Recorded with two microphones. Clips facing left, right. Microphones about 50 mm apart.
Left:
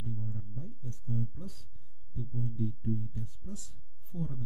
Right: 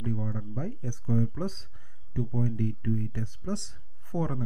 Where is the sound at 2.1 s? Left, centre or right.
Right.